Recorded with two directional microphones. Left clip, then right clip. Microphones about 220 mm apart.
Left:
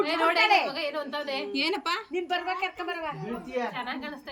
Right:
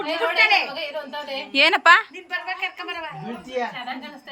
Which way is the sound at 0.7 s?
10° left (ahead or behind).